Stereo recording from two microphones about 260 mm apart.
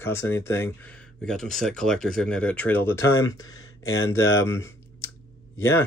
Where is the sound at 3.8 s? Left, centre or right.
Left.